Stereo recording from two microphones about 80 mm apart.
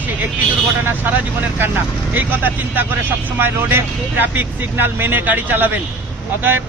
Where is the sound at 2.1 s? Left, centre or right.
Right.